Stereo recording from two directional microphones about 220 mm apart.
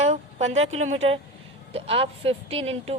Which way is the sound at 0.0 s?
30° right (ahead or behind).